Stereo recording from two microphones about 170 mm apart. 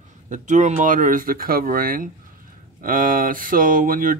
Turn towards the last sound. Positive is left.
turn(degrees=-55)  # may be behind; listen again after turning